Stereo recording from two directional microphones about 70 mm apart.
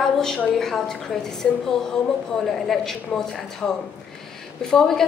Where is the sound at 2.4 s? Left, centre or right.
Centre.